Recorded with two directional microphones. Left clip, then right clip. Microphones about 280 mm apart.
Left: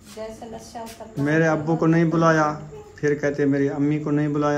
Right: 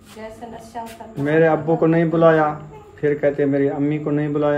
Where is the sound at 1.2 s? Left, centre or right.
Centre.